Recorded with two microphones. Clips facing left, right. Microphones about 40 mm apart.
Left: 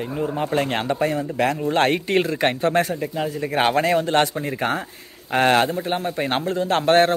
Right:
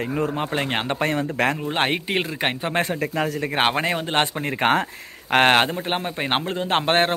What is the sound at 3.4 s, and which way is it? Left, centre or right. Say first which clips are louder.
Speech: left 4 dB; right.